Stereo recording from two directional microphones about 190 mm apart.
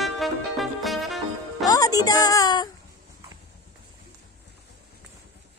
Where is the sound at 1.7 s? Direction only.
20° left (ahead or behind).